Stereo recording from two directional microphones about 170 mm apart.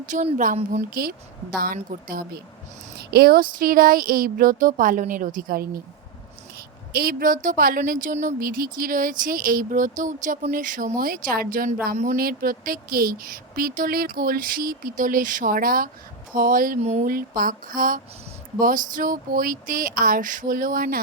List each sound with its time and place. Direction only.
0.0 s a woman's voice: 45° right (ahead or behind)
3.0 s a woman's voice: 70° right (ahead or behind)
6.9 s a woman's voice: 60° right (ahead or behind)
16.8 s speech: 40° right (ahead or behind)
17.1 s a woman's voice: 55° right (ahead or behind)